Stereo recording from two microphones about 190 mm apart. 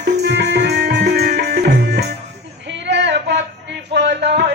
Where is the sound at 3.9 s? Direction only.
65° right (ahead or behind).